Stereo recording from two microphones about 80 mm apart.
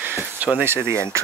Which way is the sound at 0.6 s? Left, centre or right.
Right.